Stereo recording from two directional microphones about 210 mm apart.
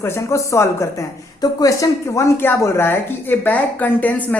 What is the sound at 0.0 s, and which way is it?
Speech, 15° left (ahead or behind).